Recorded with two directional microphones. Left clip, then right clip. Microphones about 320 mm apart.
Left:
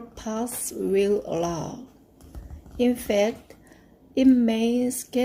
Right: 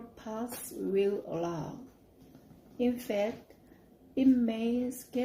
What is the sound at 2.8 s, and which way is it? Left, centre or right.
Speech, left.